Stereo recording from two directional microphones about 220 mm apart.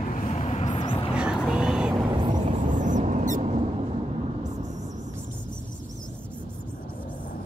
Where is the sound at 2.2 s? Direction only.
20° right (ahead or behind).